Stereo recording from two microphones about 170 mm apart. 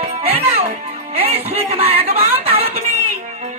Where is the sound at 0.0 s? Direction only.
40° right (ahead or behind).